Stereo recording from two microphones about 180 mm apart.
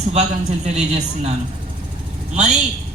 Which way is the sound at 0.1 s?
40° right (ahead or behind).